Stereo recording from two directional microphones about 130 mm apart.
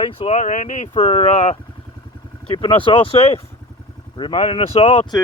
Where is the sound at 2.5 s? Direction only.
40° left (ahead or behind).